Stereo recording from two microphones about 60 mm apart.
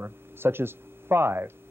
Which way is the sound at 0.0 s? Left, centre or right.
Right.